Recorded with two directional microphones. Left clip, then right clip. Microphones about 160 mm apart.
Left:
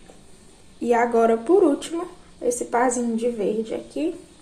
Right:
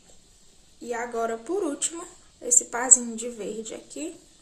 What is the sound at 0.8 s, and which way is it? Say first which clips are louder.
Speech: left 11 dB; 20° left (ahead or behind).